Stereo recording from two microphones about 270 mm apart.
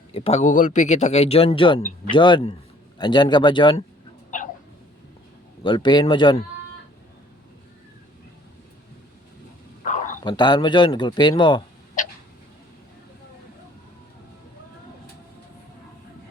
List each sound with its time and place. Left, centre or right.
0.1 s speech: left
5.6 s speech: centre
9.8 s a sound: left
10.3 s speech: centre